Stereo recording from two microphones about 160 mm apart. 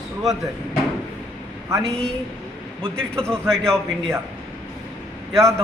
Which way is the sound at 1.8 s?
5° left (ahead or behind).